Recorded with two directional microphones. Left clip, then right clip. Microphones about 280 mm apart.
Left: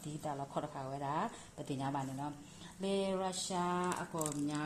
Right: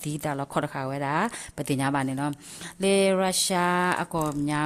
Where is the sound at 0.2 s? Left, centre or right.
Right.